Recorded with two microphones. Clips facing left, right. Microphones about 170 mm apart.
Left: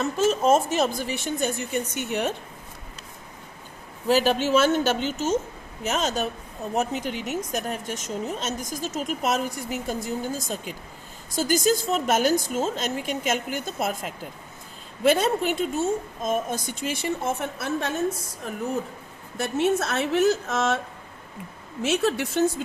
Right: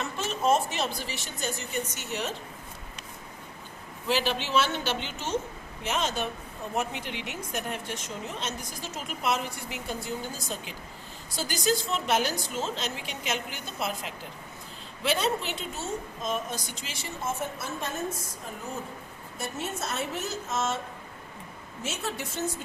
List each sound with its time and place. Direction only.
0.0 s a woman's voice: 40° left (ahead or behind)
4.0 s a woman's voice: 45° left (ahead or behind); by 17.9 s 70° left (ahead or behind)
19.4 s a woman's voice: 75° left (ahead or behind)
21.8 s a woman's voice: 75° left (ahead or behind)